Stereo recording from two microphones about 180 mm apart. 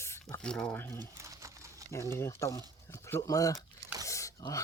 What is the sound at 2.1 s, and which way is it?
Speech, 15° left (ahead or behind).